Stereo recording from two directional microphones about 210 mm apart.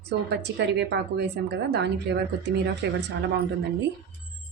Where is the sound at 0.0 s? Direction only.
55° right (ahead or behind).